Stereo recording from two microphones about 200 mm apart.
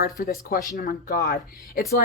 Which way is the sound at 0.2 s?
50° left (ahead or behind).